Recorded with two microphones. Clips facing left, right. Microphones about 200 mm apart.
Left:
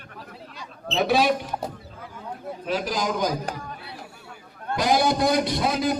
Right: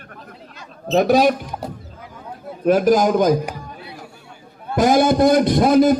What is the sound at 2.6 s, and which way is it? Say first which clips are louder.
Speech: right 13 dB; 50° right (ahead or behind).